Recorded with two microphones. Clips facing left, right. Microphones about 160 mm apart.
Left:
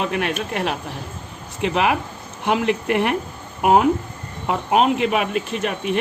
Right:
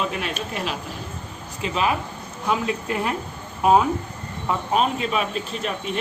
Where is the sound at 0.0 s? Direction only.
60° left (ahead or behind).